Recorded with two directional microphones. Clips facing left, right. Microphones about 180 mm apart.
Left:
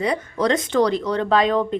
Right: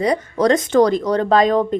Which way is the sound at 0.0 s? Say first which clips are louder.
Right 4 dB; 40° right (ahead or behind).